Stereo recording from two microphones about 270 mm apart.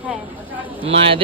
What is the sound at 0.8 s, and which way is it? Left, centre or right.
Speech, right.